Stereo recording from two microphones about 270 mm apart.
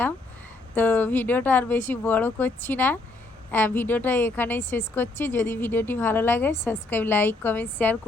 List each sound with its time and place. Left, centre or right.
0.7 s a woman's voice: centre